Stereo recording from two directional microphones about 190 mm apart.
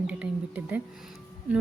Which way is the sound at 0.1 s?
5° right (ahead or behind).